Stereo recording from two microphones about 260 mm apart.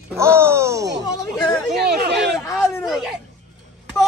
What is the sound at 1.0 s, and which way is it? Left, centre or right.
Speech, centre.